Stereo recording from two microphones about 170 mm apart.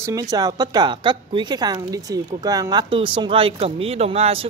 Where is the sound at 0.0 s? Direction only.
20° right (ahead or behind).